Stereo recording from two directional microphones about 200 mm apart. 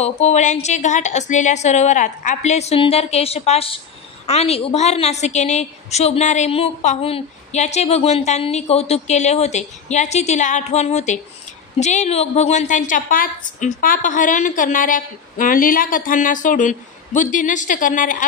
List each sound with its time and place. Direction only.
0.0 s a woman's voice: 35° left (ahead or behind)